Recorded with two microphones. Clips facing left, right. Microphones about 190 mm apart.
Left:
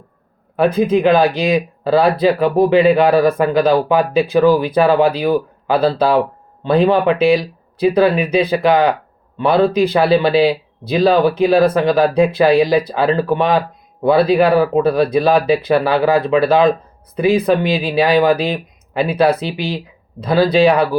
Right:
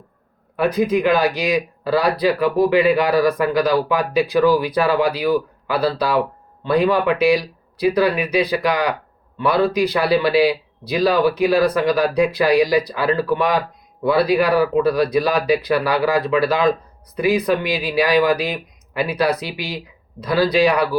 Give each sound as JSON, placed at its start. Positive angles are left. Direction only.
{"t": 0.5, "sound": "speech", "side_deg": 25}